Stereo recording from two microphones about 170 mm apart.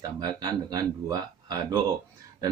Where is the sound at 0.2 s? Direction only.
25° right (ahead or behind).